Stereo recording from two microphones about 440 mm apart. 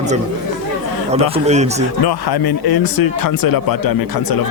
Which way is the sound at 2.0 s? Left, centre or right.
Left.